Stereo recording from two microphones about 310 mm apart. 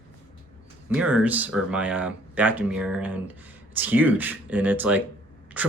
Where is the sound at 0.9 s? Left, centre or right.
Centre.